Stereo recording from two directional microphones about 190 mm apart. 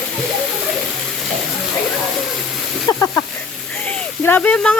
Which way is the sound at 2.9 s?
10° left (ahead or behind).